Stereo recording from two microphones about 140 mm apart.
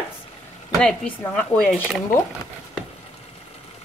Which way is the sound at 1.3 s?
5° left (ahead or behind).